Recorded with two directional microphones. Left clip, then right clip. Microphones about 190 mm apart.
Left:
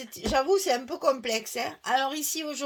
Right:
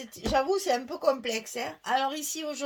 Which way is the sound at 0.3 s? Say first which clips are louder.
Left 2 dB; 40° left (ahead or behind).